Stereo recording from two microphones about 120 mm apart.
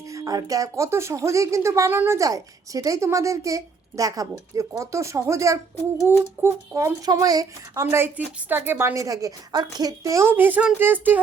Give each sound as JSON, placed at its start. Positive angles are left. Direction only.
{"t": 0.1, "sound": "speech", "side_deg": -30}